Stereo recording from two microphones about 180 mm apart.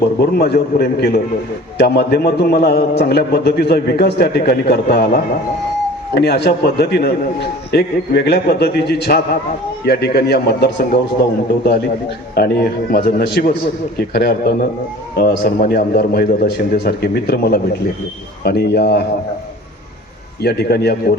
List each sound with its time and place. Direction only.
0.0 s a man's voice: 60° left (ahead or behind)
20.4 s a man's voice: 65° left (ahead or behind)